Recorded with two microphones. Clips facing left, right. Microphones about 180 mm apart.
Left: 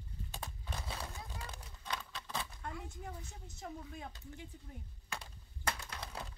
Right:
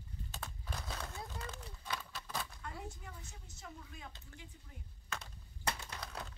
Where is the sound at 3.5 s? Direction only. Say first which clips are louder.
Left 6 dB; 55° left (ahead or behind).